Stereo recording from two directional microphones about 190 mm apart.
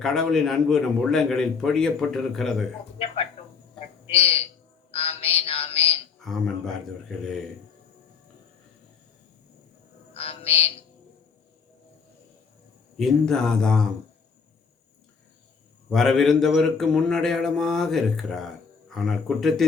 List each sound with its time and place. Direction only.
0.0 s a man's voice: 5° left (ahead or behind)
4.1 s a man's voice: 30° left (ahead or behind)
4.9 s a sound: 30° left (ahead or behind)
6.1 s a man's voice: centre (ahead or behind)
10.2 s a sound: 30° left (ahead or behind)
13.0 s a man's voice: centre (ahead or behind)
15.9 s a man's voice: centre (ahead or behind)